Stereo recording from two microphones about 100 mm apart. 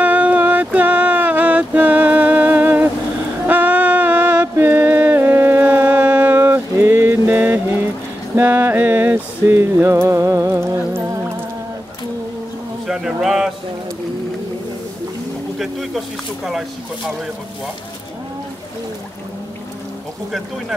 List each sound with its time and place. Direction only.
0.0 s a sound: 15° right (ahead or behind)
12.8 s speech: 5° right (ahead or behind)
15.6 s speech: centre (ahead or behind)